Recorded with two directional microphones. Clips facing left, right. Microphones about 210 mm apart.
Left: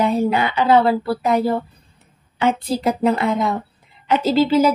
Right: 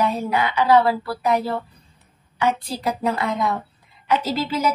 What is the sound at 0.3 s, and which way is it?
A woman's voice, 25° left (ahead or behind).